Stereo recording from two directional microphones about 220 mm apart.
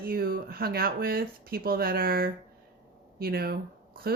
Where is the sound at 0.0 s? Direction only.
45° right (ahead or behind).